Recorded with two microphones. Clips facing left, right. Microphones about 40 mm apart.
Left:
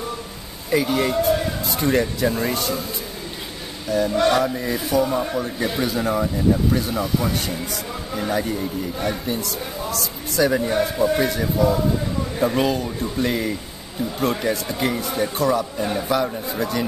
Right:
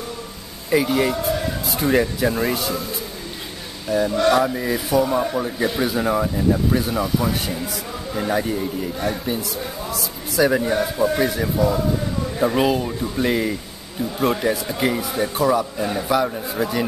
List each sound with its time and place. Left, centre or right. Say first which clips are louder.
0.7 s speech: right 1 dB; centre
3.9 s speech: right 1 dB; centre
4.6 s speech: right 1 dB; centre